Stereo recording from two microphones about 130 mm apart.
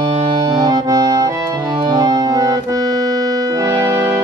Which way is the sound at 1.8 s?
30° right (ahead or behind).